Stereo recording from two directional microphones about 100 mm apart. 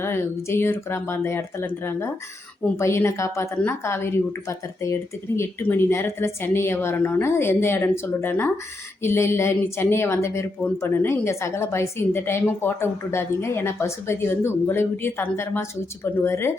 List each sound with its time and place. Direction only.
0.0 s a woman's voice: 25° left (ahead or behind)